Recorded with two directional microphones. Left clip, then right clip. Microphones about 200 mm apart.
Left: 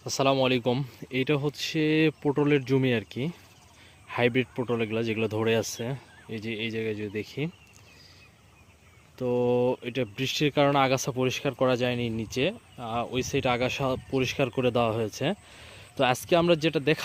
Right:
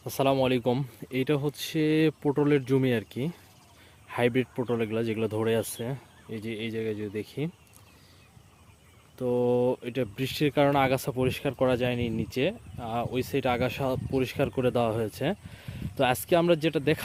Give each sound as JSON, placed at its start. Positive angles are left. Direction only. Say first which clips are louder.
{"t": 0.0, "sound": "speech", "louder": "left 1 dB", "side_deg": -5}
{"t": 9.1, "sound": "speech", "louder": "even", "side_deg": -5}